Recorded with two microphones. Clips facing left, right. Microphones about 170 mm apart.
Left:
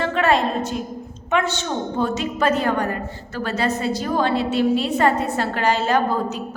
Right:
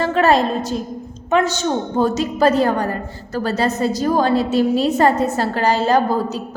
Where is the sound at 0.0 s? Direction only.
40° right (ahead or behind).